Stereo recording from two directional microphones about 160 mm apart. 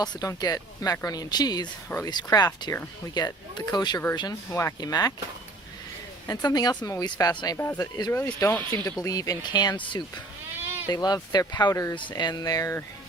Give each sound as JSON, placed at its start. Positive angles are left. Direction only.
{"t": 0.0, "sound": "speech", "side_deg": 25}
{"t": 6.2, "sound": "speech", "side_deg": 25}
{"t": 10.8, "sound": "speech", "side_deg": 25}